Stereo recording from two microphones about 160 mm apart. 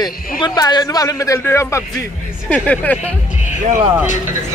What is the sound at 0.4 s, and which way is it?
A woman's voice, 25° left (ahead or behind).